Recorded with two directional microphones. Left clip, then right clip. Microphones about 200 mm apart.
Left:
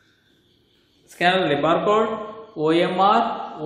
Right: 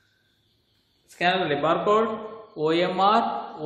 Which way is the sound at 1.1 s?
Centre (ahead or behind).